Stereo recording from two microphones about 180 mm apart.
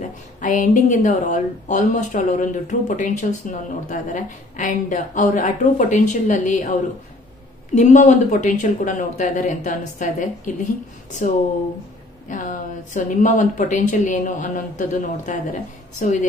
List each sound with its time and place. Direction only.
0.0 s a woman's voice: 45° left (ahead or behind)
7.7 s a woman's voice: 45° left (ahead or behind)
12.3 s a woman's voice: 45° left (ahead or behind)